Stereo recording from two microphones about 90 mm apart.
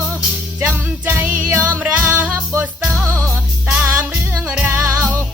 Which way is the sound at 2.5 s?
30° right (ahead or behind).